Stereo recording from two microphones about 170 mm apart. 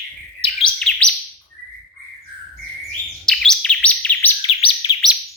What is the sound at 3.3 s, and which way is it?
Bird, 5° left (ahead or behind).